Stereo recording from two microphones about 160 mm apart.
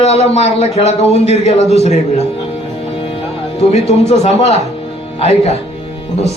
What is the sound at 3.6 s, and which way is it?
Speech, 40° left (ahead or behind).